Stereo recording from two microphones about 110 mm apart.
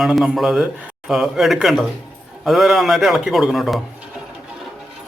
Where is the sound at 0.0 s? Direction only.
Centre (ahead or behind).